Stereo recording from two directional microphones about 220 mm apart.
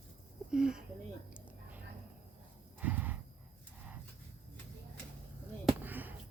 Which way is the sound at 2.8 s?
5° right (ahead or behind).